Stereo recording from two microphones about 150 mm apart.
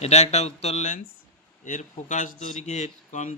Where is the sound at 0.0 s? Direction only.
45° left (ahead or behind).